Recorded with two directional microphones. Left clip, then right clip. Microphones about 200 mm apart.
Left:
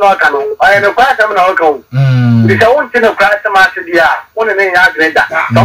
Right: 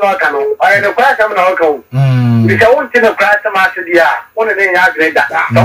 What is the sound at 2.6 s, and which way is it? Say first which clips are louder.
Speech: right 1 dB; 25° left (ahead or behind).